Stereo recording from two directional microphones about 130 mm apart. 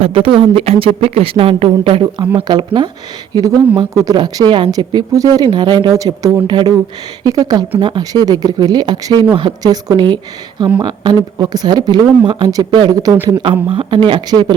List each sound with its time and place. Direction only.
0.0 s a woman's voice: 45° right (ahead or behind)